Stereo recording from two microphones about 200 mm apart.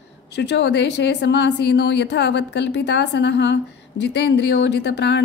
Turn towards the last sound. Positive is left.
turn(degrees=60)  # may be behind; listen again after turning